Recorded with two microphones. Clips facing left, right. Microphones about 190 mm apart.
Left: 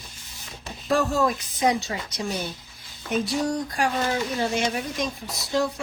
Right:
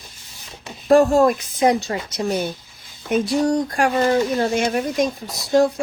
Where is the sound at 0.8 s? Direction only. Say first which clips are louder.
Right 9 dB; 50° right (ahead or behind).